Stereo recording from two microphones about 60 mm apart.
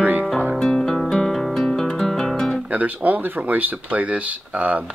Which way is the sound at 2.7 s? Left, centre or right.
Right.